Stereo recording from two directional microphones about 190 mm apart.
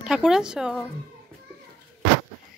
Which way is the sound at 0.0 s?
5° right (ahead or behind).